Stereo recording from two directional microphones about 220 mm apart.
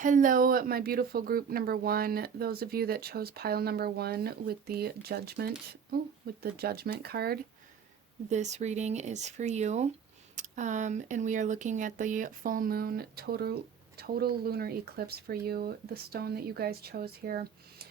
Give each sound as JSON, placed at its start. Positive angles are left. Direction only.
{"t": 0.0, "sound": "speech", "side_deg": -35}
{"t": 8.3, "sound": "speech", "side_deg": -30}